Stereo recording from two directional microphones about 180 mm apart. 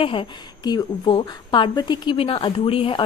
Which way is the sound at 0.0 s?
25° left (ahead or behind).